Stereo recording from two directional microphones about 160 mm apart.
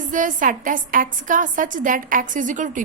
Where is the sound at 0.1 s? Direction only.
55° right (ahead or behind).